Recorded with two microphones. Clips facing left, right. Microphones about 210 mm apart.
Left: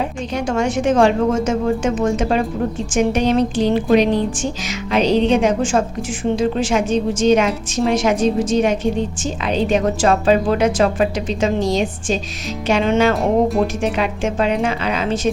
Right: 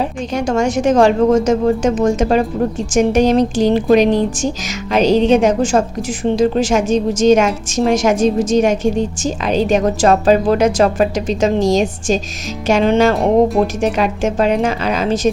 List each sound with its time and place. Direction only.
0.0 s a woman's voice: 40° right (ahead or behind)
13.1 s speech: centre (ahead or behind)
13.9 s a woman's voice: 40° right (ahead or behind)